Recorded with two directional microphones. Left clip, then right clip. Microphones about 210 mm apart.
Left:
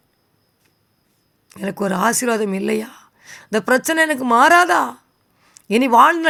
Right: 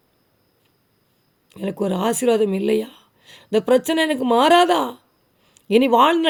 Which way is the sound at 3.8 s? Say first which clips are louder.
Left 3 dB; 15° left (ahead or behind).